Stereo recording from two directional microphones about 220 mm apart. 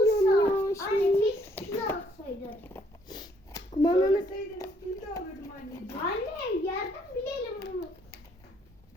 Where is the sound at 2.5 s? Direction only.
10° left (ahead or behind).